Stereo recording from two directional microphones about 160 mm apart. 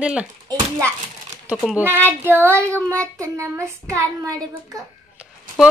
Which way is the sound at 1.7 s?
15° right (ahead or behind).